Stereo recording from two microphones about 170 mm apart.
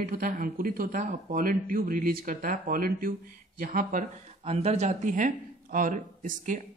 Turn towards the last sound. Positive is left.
turn(degrees=-50)  # may be behind; listen again after turning